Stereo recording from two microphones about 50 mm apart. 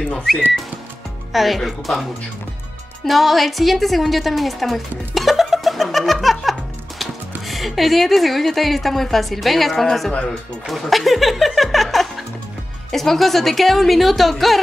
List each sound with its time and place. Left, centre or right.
1.3 s speech: centre
3.1 s a woman's voice: centre